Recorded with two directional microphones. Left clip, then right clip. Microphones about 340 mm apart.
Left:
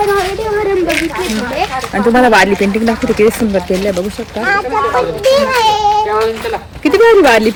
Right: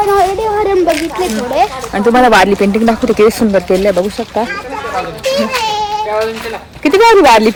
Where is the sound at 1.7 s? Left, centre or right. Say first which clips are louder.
Right 1 dB; centre.